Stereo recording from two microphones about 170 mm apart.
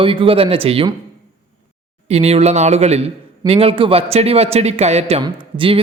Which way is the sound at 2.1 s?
40° right (ahead or behind).